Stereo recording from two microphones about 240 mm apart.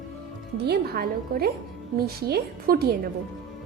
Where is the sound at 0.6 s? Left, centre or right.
Right.